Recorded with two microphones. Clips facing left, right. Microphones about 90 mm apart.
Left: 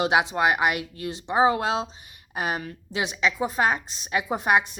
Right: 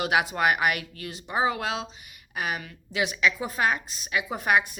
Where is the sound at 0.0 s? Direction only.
25° left (ahead or behind).